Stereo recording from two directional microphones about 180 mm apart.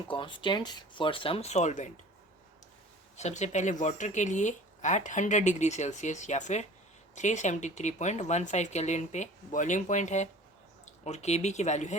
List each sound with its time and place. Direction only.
0.1 s speech: 25° left (ahead or behind)
3.2 s speech: 40° left (ahead or behind)